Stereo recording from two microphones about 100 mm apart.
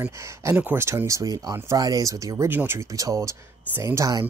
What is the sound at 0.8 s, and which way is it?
Speech, 30° right (ahead or behind).